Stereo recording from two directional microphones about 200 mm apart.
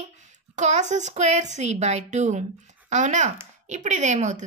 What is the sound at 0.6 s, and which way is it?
A woman's voice, 35° right (ahead or behind).